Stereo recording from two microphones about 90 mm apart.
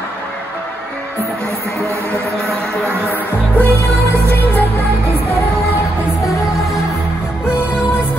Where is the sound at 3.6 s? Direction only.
30° right (ahead or behind).